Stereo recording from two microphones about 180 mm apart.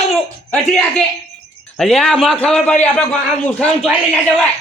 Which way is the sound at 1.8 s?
5° left (ahead or behind).